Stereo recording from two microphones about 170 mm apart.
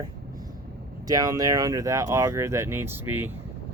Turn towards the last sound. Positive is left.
turn(degrees=-10)  # may be behind; listen again after turning